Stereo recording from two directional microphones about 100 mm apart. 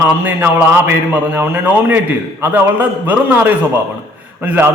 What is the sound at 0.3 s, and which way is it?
A man's voice, 20° right (ahead or behind).